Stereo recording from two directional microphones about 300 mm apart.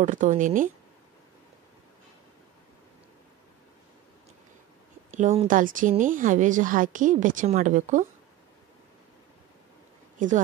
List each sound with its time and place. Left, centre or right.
0.0 s a woman's voice: right
5.1 s a woman's voice: right
10.1 s speech: right